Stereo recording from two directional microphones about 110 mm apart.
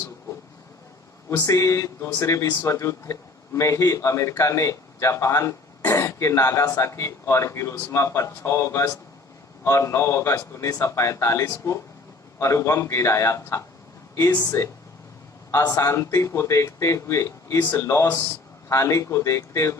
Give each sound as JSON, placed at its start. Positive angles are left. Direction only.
{"t": 1.4, "sound": "speech", "side_deg": 30}